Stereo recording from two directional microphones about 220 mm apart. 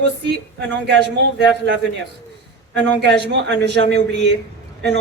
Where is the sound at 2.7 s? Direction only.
50° right (ahead or behind).